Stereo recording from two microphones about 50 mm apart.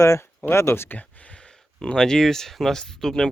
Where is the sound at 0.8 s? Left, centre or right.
Left.